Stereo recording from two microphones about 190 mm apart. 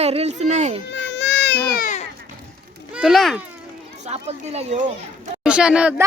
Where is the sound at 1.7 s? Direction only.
40° left (ahead or behind).